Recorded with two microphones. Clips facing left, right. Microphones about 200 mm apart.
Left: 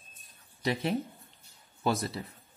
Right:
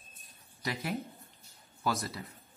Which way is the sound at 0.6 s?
25° left (ahead or behind).